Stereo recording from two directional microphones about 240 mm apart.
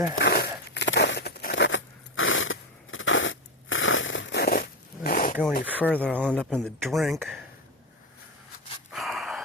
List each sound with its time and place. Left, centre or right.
0.2 s a sound: left
0.7 s biting: left
5.6 s speech: centre
5.9 s speech: centre
6.1 s speech: centre
8.9 s gasp: centre